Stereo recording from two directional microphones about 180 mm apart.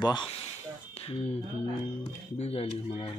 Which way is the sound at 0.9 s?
35° left (ahead or behind).